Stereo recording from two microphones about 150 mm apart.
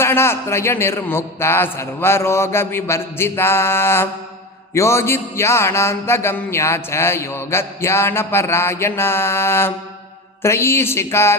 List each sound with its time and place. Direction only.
0.0 s music: 15° left (ahead or behind)